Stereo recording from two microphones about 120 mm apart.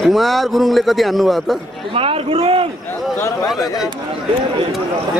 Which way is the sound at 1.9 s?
50° right (ahead or behind).